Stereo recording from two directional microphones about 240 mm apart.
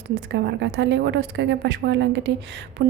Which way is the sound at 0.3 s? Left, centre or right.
Right.